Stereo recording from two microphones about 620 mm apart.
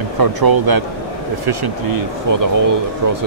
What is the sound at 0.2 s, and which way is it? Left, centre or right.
Speech, right.